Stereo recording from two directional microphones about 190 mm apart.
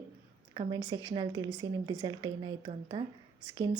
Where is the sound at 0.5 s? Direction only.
25° right (ahead or behind).